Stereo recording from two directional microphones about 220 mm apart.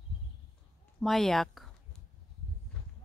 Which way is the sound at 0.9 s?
Centre (ahead or behind).